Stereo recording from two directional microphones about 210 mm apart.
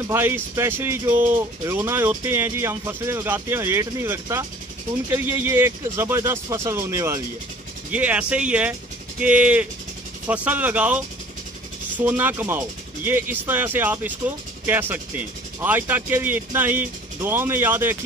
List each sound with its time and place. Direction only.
0.1 s speech: 10° right (ahead or behind)